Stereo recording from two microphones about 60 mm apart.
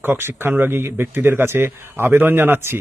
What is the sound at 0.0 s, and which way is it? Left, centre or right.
A man's voice, right.